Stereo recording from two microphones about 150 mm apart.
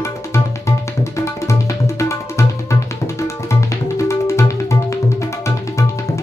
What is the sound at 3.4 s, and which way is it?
Music, 20° left (ahead or behind).